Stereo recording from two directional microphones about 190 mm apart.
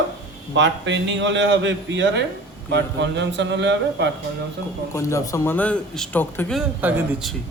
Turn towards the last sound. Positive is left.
turn(degrees=0)  # may be behind; listen again after turning